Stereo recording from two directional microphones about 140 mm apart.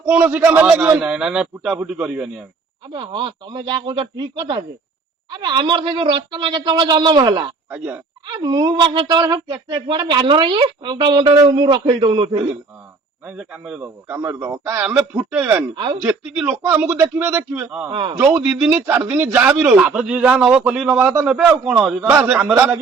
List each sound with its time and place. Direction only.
0.0 s a man's voice: 15° right (ahead or behind)
2.9 s speech: 35° right (ahead or behind)
7.7 s a man's voice: 15° right (ahead or behind)
8.3 s speech: 30° right (ahead or behind)
13.2 s a man's voice: 10° right (ahead or behind)
15.7 s speech: 35° right (ahead or behind)
16.0 s a man's voice: 15° right (ahead or behind)
17.9 s speech: 40° right (ahead or behind)
18.2 s a man's voice: 15° right (ahead or behind)